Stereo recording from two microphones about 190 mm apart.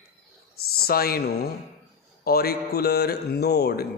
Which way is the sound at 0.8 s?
55° left (ahead or behind).